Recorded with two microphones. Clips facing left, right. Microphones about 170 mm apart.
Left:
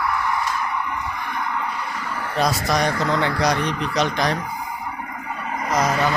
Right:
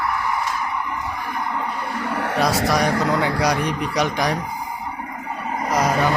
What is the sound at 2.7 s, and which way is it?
Speech, 10° right (ahead or behind).